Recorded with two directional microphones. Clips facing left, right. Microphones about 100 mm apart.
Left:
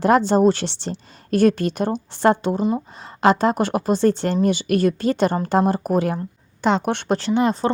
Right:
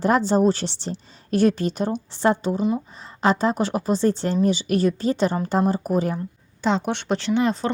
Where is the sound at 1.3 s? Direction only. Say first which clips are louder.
Left 2 dB; 55° left (ahead or behind).